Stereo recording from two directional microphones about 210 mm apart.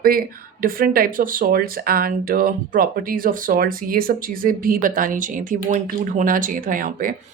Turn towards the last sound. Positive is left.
turn(degrees=-40)  # may be behind; listen again after turning